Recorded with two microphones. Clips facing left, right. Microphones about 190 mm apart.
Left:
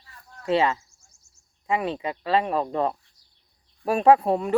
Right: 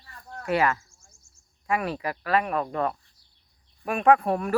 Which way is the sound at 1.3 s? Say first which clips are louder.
Right 3 dB; 50° right (ahead or behind).